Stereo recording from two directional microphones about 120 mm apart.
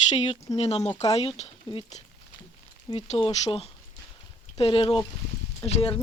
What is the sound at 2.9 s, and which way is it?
Speech, 50° left (ahead or behind).